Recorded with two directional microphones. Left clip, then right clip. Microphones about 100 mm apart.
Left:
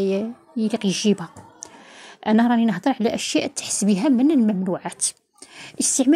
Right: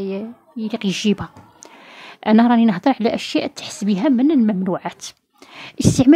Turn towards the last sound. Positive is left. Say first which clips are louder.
# right 5 dB
turn(degrees=-35)  # may be behind; listen again after turning